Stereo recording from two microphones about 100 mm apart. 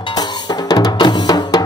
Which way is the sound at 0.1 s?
40° left (ahead or behind).